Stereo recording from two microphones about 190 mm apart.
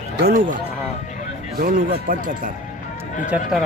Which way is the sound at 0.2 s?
45° right (ahead or behind).